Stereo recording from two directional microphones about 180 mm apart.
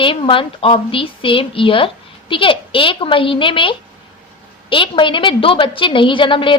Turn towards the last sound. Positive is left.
turn(degrees=30)  # may be behind; listen again after turning